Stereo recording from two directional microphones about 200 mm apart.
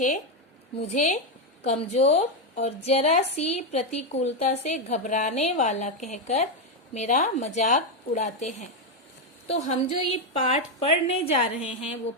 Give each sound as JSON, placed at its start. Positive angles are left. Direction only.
{"t": 0.9, "sound": "a woman's voice", "side_deg": 35}